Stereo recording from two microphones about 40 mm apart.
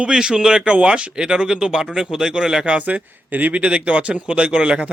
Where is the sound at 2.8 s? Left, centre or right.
Right.